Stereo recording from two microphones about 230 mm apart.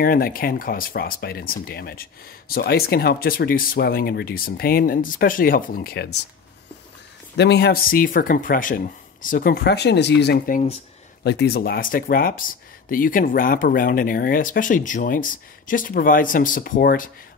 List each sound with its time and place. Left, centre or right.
0.0 s speech: left
7.3 s speech: left
11.2 s speech: left